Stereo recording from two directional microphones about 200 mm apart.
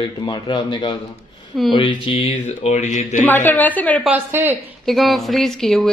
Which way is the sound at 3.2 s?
10° left (ahead or behind).